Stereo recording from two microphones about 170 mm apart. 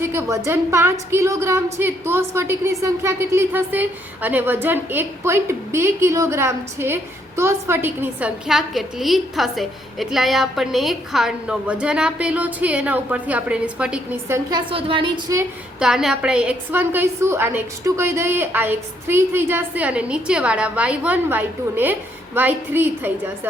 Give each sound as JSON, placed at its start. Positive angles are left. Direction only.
{"t": 0.0, "sound": "a woman's voice", "side_deg": -15}
{"t": 14.7, "sound": "a woman's voice", "side_deg": -30}
{"t": 15.8, "sound": "a woman's voice", "side_deg": 0}